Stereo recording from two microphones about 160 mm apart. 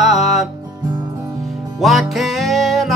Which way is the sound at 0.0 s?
Centre (ahead or behind).